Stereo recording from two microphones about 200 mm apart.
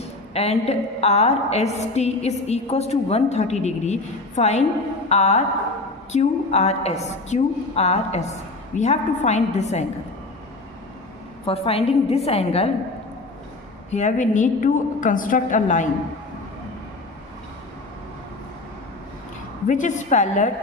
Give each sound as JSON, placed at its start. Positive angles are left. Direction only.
{"t": 0.3, "sound": "a woman's voice", "side_deg": 30}
{"t": 11.4, "sound": "a woman's voice", "side_deg": 30}
{"t": 13.9, "sound": "a woman's voice", "side_deg": 35}
{"t": 19.6, "sound": "a woman's voice", "side_deg": 40}